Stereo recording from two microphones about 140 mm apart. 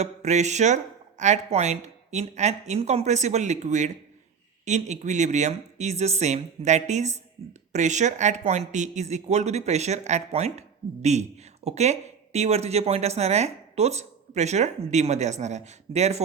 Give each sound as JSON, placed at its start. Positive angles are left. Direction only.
{"t": 0.0, "sound": "speech", "side_deg": -55}